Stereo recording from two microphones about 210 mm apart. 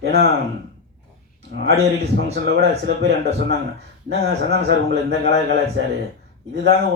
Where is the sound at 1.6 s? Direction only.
50° right (ahead or behind).